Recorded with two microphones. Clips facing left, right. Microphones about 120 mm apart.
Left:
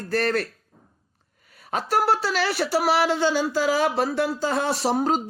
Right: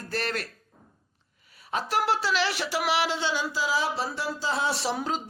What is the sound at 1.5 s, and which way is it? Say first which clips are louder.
Speech: left 4 dB; 45° left (ahead or behind).